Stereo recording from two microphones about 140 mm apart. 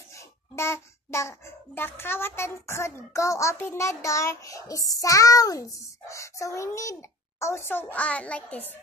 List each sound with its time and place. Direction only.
0.6 s child singing: 20° left (ahead or behind)
1.8 s a child's voice: 15° left (ahead or behind)